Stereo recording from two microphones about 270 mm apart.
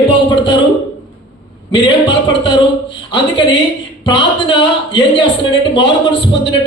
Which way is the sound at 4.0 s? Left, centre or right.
Centre.